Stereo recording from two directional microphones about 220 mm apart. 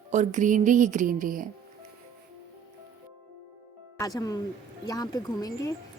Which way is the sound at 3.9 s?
15° left (ahead or behind).